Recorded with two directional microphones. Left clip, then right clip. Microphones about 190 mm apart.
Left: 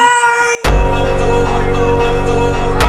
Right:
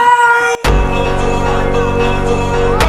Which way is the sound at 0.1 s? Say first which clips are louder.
Right 1 dB; 10° left (ahead or behind).